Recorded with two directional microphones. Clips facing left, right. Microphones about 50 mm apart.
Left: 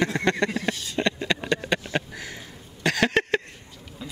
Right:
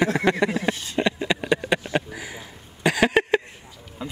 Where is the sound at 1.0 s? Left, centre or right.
Centre.